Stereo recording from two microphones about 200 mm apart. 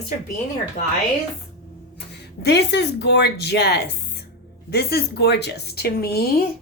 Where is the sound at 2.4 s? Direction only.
55° left (ahead or behind).